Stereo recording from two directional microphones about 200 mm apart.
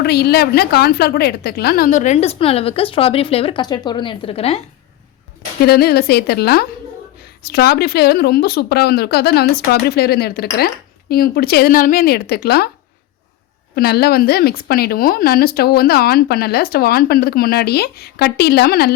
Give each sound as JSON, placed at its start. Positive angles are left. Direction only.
{"t": 0.0, "sound": "a woman's voice", "side_deg": 55}
{"t": 5.6, "sound": "speech", "side_deg": 50}
{"t": 13.7, "sound": "speech", "side_deg": 50}